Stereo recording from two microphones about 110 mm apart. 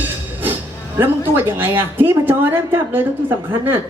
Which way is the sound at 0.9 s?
20° right (ahead or behind).